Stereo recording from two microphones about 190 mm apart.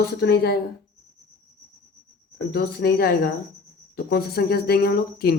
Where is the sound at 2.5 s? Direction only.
55° left (ahead or behind).